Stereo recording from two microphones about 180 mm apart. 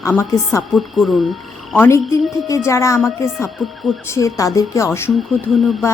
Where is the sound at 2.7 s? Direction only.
15° left (ahead or behind).